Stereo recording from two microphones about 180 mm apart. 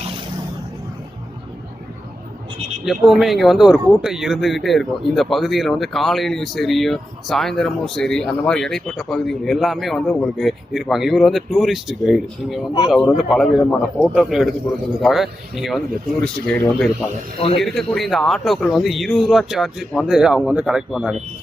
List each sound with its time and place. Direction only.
2.8 s speech: centre (ahead or behind)